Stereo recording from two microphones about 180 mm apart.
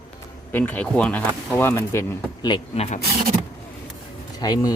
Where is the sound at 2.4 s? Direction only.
30° left (ahead or behind).